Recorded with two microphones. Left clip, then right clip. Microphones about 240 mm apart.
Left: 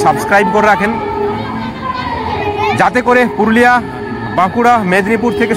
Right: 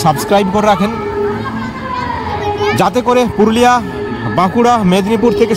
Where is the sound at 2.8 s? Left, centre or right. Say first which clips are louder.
Left 2 dB; right.